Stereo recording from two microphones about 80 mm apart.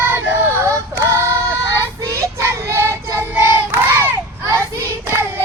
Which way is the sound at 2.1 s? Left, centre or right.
Right.